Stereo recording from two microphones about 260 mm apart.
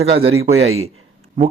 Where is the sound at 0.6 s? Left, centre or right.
Right.